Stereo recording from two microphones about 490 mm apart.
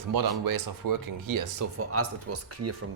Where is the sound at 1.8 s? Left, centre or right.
Right.